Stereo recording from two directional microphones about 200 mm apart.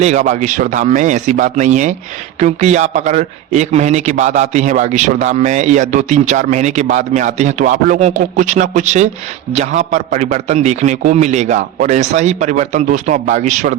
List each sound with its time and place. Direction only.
0.0 s a man's voice: 35° right (ahead or behind)